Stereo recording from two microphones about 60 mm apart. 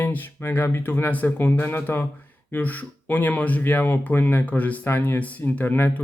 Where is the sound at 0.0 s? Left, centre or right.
Left.